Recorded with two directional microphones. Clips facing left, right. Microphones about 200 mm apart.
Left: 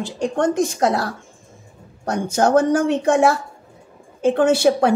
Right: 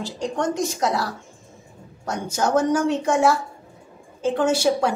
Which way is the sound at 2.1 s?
55° left (ahead or behind).